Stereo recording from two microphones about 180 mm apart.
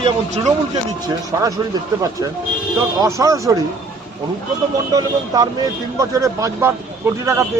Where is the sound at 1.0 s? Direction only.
20° right (ahead or behind).